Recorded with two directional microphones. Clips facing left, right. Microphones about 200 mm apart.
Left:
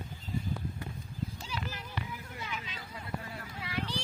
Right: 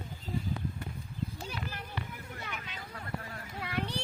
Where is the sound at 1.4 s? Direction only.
55° right (ahead or behind).